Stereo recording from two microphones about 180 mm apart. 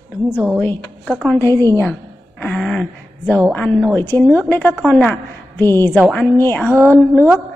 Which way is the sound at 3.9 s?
15° left (ahead or behind).